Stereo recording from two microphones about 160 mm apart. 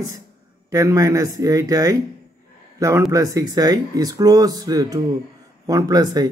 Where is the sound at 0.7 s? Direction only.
20° right (ahead or behind).